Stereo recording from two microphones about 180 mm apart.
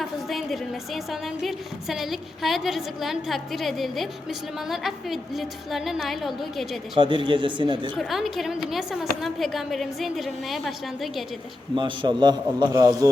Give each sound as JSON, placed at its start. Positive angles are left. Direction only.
{"t": 0.0, "sound": "a woman's voice", "side_deg": 0}
{"t": 6.9, "sound": "a man's voice", "side_deg": -25}
{"t": 7.9, "sound": "a woman's voice", "side_deg": 0}
{"t": 11.7, "sound": "a man's voice", "side_deg": -25}